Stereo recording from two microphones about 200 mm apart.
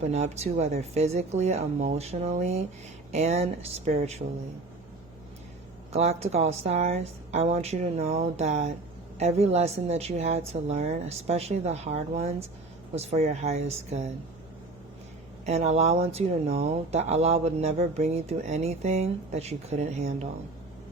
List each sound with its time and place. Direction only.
0.1 s speech: 35° right (ahead or behind)
5.9 s speech: 30° right (ahead or behind)
15.4 s speech: 30° right (ahead or behind)